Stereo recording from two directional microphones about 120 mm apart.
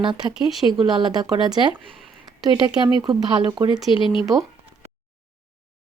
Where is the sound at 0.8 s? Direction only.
35° right (ahead or behind).